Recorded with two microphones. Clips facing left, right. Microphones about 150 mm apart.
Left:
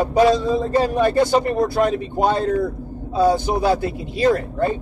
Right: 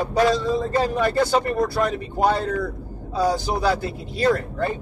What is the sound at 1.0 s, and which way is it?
Speech, 20° left (ahead or behind).